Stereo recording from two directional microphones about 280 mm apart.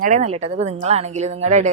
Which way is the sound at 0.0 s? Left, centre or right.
Right.